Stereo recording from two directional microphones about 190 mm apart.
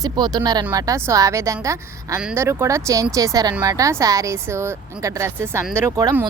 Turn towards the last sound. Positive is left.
turn(degrees=-15)  # may be behind; listen again after turning